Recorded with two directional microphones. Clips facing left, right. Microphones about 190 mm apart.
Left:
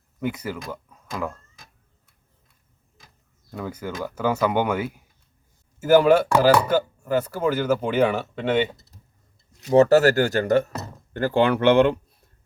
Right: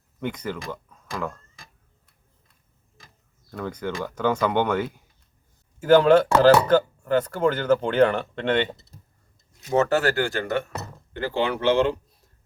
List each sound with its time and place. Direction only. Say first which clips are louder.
0.2 s speech: left 1 dB; 5° left (ahead or behind)
3.5 s speech: right 1 dB; 5° left (ahead or behind)
9.6 s speech: left 6 dB; 35° left (ahead or behind); by 11.9 s 60° left (ahead or behind)